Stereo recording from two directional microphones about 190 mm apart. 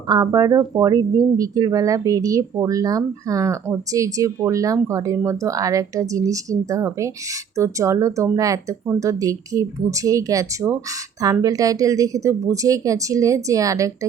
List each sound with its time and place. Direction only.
0.1 s speech: 20° right (ahead or behind)